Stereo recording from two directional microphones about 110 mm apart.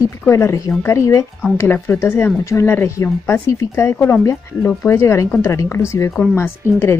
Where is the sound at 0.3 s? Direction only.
25° left (ahead or behind).